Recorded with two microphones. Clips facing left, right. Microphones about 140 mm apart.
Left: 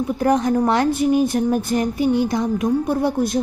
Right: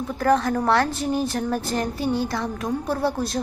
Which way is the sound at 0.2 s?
15° left (ahead or behind).